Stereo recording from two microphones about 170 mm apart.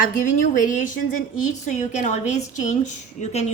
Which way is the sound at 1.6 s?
45° left (ahead or behind).